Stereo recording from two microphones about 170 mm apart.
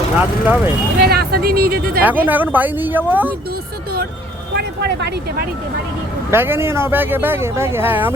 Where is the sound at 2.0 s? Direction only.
10° right (ahead or behind).